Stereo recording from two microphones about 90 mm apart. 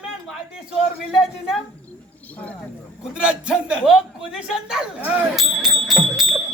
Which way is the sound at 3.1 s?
10° right (ahead or behind).